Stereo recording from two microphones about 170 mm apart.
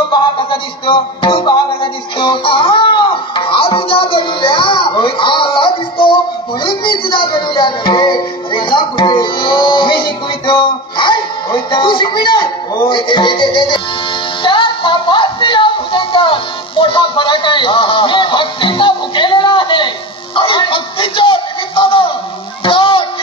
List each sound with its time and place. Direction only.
0.1 s music: 30° left (ahead or behind)
20.3 s speech: 30° left (ahead or behind)
22.6 s a sound: 30° left (ahead or behind)